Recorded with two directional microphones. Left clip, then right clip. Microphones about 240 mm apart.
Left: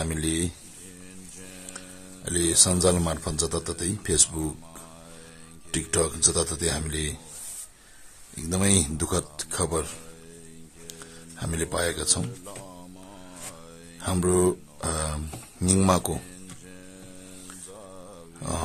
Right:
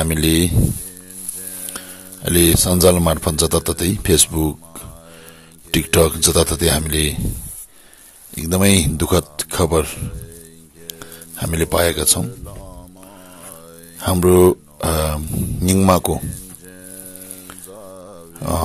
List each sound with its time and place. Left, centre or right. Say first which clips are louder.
0.0 s speech: right 11 dB; right
2.2 s speech: right 8 dB; right
5.7 s speech: right 12 dB; right
8.4 s speech: right 9 dB; right
10.9 s speech: right 9 dB; right
13.9 s speech: right 11 dB; right
17.7 s a sound: right 10 dB; centre